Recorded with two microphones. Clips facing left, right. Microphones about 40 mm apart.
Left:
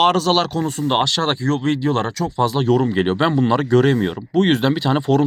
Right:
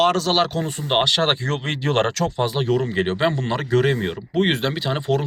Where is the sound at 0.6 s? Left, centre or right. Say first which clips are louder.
Left 2 dB; right.